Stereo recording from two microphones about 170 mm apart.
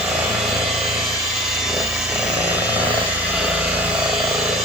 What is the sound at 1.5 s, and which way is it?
Helicopter, centre (ahead or behind).